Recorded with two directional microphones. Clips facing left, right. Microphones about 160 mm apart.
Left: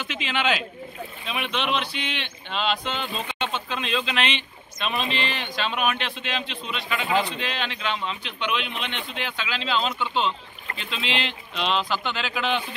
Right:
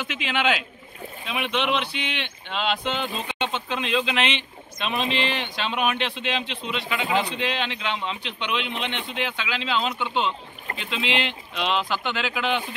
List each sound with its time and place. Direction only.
0.0 s a man's voice: 15° right (ahead or behind)